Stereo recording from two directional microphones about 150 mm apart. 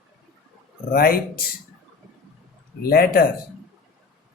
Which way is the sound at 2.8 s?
85° left.